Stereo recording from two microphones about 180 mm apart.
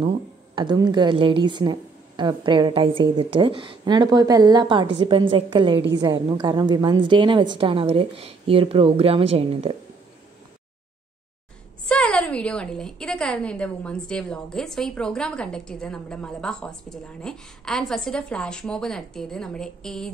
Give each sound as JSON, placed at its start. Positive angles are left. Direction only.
{"t": 0.6, "sound": "a woman's voice", "side_deg": -25}
{"t": 11.9, "sound": "a woman's voice", "side_deg": 5}